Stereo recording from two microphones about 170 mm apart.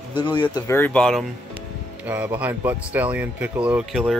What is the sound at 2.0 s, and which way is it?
Speech, 10° right (ahead or behind).